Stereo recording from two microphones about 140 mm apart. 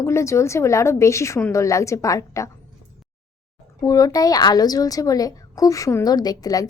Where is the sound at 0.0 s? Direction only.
20° left (ahead or behind).